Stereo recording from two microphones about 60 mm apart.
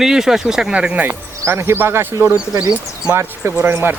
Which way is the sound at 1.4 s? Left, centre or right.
Right.